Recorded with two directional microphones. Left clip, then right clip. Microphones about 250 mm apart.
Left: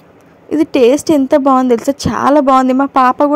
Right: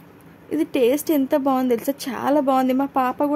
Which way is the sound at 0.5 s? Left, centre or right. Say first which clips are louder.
Left 9 dB; left.